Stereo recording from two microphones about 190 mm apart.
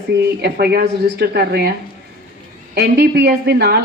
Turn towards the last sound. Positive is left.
turn(degrees=-55)  # may be behind; listen again after turning